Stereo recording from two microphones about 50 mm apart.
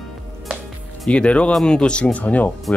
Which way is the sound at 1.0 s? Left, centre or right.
Left.